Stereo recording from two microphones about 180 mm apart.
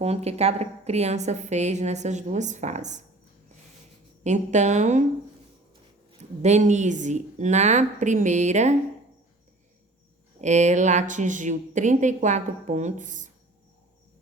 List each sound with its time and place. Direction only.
0.0 s a woman's voice: 35° right (ahead or behind)
4.2 s a woman's voice: 40° right (ahead or behind)
6.1 s a woman's voice: 40° right (ahead or behind)
10.4 s speech: 40° right (ahead or behind)